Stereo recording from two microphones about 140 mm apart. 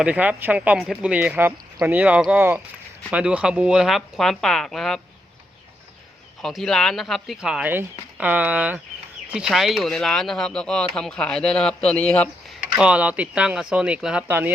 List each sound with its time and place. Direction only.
0.0 s speech: 10° right (ahead or behind)
6.4 s speech: centre (ahead or behind)
12.5 s speech: 10° right (ahead or behind)